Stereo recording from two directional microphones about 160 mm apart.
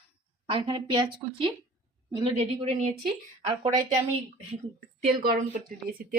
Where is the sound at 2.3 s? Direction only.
40° right (ahead or behind).